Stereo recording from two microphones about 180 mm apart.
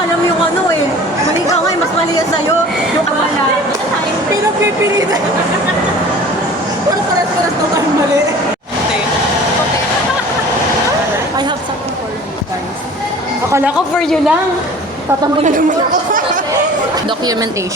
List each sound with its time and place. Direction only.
13.5 s speech: 10° right (ahead or behind)
14.0 s a woman's voice: centre (ahead or behind)
15.4 s chatter: 45° right (ahead or behind)